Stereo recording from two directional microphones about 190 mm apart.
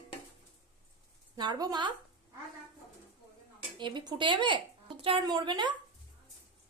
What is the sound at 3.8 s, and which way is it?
Speech, 25° right (ahead or behind).